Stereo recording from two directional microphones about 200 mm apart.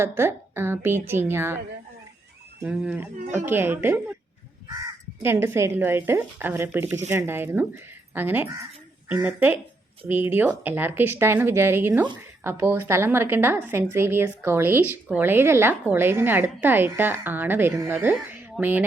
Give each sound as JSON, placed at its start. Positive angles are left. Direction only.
{"t": 0.0, "sound": "a woman's voice", "side_deg": -10}
{"t": 2.6, "sound": "a woman's voice", "side_deg": -5}
{"t": 5.2, "sound": "a woman's voice", "side_deg": -10}